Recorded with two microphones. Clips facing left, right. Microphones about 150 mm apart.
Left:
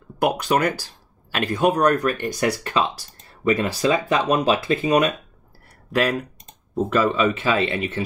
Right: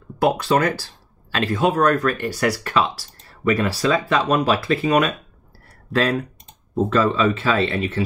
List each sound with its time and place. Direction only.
0.2 s speech: 15° left (ahead or behind)